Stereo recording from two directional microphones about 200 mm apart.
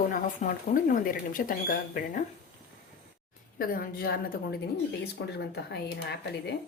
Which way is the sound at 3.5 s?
45° left (ahead or behind).